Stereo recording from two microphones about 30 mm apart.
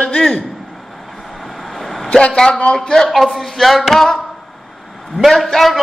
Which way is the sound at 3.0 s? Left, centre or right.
Centre.